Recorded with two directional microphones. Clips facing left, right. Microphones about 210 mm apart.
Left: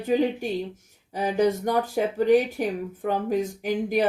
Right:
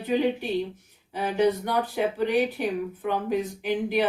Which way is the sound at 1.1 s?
40° left (ahead or behind).